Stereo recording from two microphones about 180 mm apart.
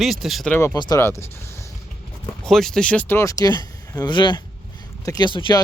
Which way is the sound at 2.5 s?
Centre (ahead or behind).